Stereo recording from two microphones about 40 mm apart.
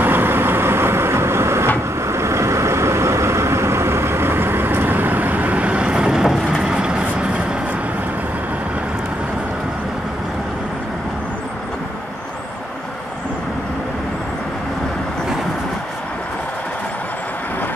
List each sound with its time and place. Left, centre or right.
0.0 s vehicle: right
3.4 s vehicle: right